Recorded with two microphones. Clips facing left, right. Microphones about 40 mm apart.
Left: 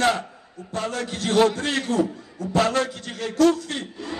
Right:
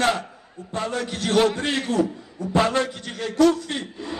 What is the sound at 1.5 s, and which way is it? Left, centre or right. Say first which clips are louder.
A man's voice: even; right.